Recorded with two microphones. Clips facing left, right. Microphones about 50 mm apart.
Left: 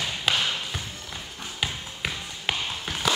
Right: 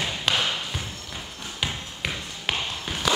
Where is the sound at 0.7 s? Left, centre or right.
Centre.